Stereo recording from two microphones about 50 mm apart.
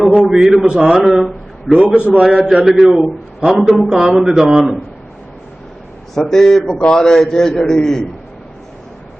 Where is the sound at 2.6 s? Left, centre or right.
Centre.